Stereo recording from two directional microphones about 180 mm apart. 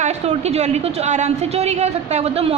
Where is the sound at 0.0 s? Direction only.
35° right (ahead or behind).